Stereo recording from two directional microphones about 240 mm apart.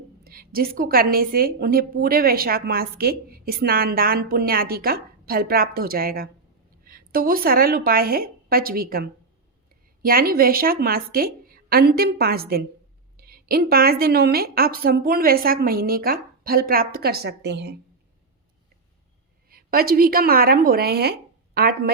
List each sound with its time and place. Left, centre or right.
0.3 s a woman's voice: right
19.5 s a woman's voice: right